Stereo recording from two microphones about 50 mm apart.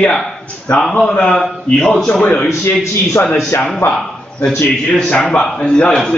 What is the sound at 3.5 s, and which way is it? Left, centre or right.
Speech, left.